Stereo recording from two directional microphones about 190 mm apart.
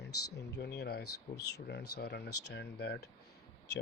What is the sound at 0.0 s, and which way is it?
Speech, 60° left (ahead or behind).